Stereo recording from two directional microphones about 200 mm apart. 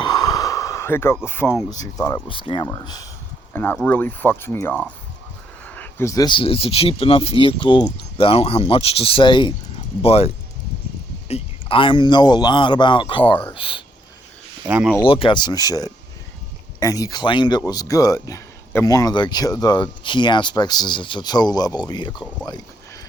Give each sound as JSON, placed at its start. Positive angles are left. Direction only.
{"t": 0.0, "sound": "a sound", "side_deg": 20}
{"t": 1.7, "sound": "speech", "side_deg": 20}
{"t": 14.7, "sound": "speech", "side_deg": -10}
{"t": 15.0, "sound": "speech", "side_deg": 25}